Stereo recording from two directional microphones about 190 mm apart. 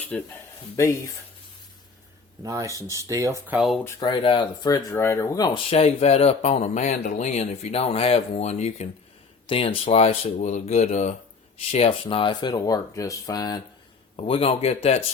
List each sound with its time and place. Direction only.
0.1 s a man's voice: 5° left (ahead or behind)
2.4 s speech: 15° right (ahead or behind)
3.8 s speech: 25° left (ahead or behind)
5.7 s speech: 35° left (ahead or behind)
14.2 s speech: 30° left (ahead or behind)